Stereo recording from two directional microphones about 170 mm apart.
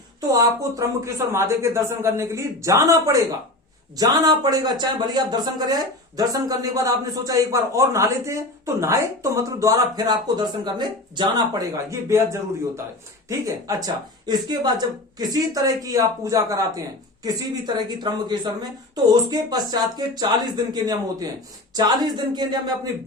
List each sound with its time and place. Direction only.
0.2 s a man's voice: 20° right (ahead or behind)